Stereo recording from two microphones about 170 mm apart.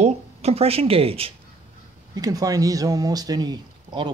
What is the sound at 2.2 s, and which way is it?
Speech, 20° right (ahead or behind).